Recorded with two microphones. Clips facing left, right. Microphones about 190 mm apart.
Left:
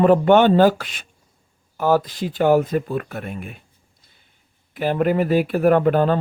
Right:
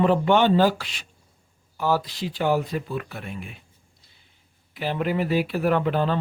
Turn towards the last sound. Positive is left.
turn(degrees=50)  # may be behind; listen again after turning